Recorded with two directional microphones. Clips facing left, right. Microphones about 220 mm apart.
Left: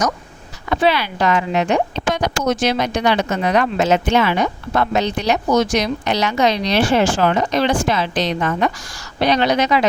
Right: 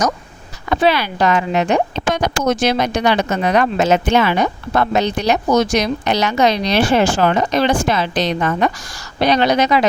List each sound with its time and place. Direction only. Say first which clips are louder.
0.7 s speech: right 2 dB; 45° right (ahead or behind)